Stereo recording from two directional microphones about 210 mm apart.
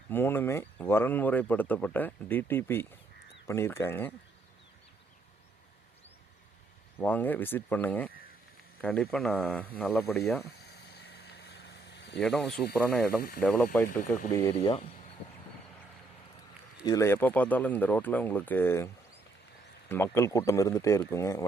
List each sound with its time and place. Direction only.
0.1 s speech: 10° left (ahead or behind)
7.0 s speech: 10° left (ahead or behind)
10.6 s a sound: 50° left (ahead or behind)
12.2 s speech: centre (ahead or behind)
14.5 s speech: 30° left (ahead or behind)
16.8 s speech: 15° left (ahead or behind)
19.9 s speech: 10° left (ahead or behind)